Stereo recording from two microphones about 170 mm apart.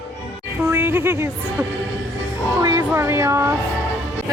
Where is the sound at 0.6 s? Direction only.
15° right (ahead or behind).